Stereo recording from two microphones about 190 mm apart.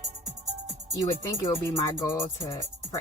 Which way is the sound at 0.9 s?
15° left (ahead or behind).